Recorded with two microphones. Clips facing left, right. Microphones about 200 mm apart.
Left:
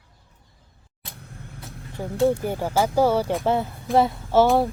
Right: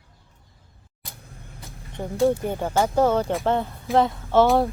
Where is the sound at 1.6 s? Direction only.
5° left (ahead or behind).